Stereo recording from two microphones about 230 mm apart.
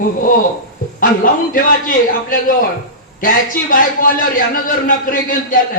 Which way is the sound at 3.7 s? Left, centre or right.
Left.